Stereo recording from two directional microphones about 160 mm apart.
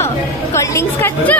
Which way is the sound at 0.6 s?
15° left (ahead or behind).